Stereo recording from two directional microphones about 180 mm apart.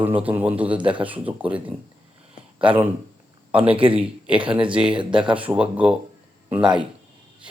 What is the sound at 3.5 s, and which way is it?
Speech, 30° right (ahead or behind).